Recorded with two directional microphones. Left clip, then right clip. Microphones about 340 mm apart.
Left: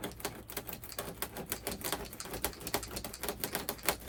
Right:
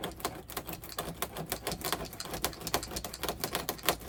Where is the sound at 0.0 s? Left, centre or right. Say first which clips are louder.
Right 4 dB; centre.